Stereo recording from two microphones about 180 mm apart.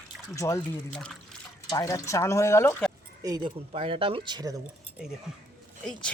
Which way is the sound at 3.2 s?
20° right (ahead or behind).